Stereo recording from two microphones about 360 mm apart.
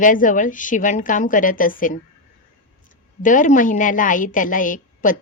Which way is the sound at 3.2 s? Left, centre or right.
Left.